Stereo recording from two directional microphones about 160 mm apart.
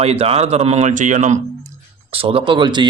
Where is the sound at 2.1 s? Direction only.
35° right (ahead or behind).